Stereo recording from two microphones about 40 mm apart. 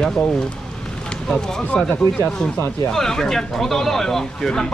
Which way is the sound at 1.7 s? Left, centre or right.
Left.